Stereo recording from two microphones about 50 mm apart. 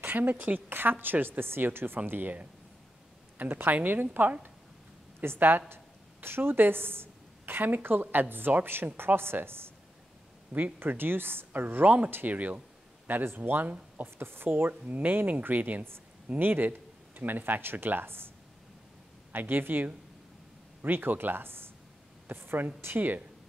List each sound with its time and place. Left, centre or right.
0.0 s a woman's voice: right
7.6 s a woman's voice: right
10.5 s speech: right
12.1 s a woman's voice: right
12.4 s a sound: right
13.4 s speech: right
14.1 s a woman's voice: right
14.5 s speech: right
19.3 s a woman's voice: right